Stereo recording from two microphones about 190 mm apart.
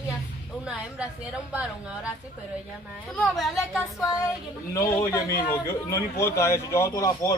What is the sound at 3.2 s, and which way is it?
Speech, centre (ahead or behind).